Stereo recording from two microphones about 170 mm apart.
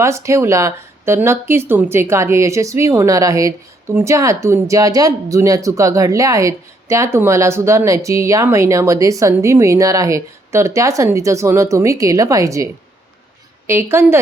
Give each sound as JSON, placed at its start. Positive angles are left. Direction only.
{"t": 0.0, "sound": "speech", "side_deg": -15}
{"t": 13.7, "sound": "speech", "side_deg": -15}